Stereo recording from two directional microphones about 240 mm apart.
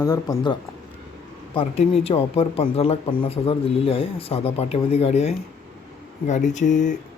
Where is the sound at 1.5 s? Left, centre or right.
Left.